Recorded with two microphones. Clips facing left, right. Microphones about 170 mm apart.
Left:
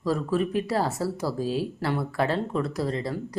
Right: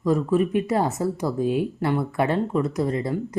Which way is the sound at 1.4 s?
55° right (ahead or behind).